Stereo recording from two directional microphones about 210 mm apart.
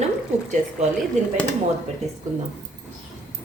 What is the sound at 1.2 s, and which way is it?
Speech, 35° right (ahead or behind).